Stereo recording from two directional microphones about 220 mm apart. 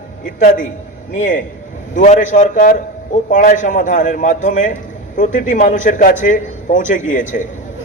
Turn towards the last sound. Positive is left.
turn(degrees=35)  # may be behind; listen again after turning